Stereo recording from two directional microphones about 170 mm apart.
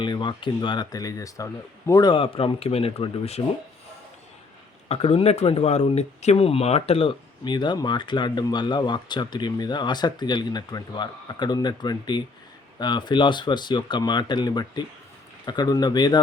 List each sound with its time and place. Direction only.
0.0 s speech: 25° left (ahead or behind)
4.9 s speech: 35° left (ahead or behind)